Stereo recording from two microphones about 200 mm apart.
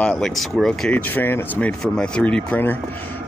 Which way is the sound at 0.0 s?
Centre (ahead or behind).